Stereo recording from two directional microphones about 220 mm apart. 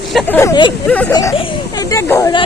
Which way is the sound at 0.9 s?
5° left (ahead or behind).